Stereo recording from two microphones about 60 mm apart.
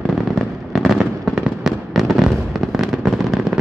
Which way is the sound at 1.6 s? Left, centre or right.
Centre.